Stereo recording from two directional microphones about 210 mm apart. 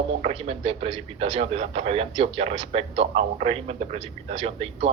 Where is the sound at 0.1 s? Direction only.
30° right (ahead or behind).